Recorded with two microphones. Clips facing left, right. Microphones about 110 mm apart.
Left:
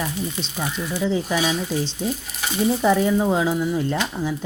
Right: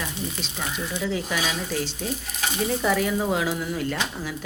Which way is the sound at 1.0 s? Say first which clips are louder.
Left 6 dB; 25° left (ahead or behind).